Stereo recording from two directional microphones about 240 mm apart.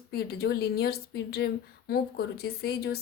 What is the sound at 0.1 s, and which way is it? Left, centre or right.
A woman's voice, left.